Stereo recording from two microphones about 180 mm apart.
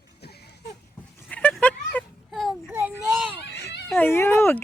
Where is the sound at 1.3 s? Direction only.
5° left (ahead or behind).